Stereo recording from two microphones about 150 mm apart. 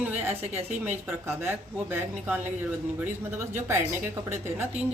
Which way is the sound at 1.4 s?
15° right (ahead or behind).